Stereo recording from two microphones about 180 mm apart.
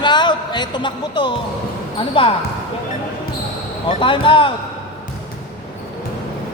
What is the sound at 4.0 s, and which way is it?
Speech, 30° left (ahead or behind).